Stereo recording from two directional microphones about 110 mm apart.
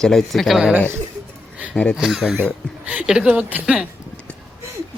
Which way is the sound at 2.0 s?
Centre (ahead or behind).